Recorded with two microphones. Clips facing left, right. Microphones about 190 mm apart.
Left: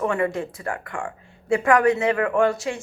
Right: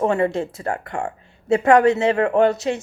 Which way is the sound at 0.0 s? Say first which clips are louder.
Right 4 dB; 25° right (ahead or behind).